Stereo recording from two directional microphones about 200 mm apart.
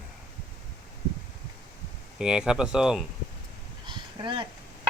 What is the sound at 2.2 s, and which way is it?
Speech, 5° right (ahead or behind).